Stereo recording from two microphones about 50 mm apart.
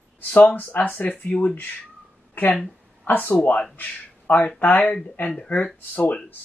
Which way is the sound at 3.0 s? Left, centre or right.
Left.